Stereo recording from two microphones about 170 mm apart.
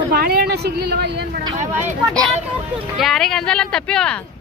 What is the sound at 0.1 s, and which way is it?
Speech, 65° right (ahead or behind).